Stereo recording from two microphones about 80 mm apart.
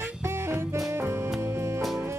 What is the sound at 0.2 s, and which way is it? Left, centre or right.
Music, right.